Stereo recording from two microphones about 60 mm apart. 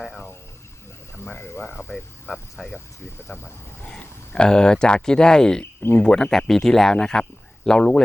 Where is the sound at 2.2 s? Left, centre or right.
Left.